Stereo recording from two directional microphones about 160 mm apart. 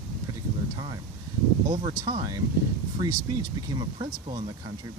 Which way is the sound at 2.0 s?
25° right (ahead or behind).